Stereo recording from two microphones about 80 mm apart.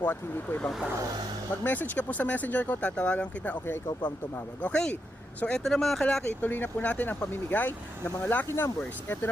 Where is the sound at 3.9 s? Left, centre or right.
Left.